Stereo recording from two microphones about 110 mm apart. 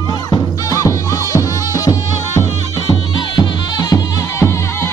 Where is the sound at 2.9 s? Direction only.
40° left (ahead or behind).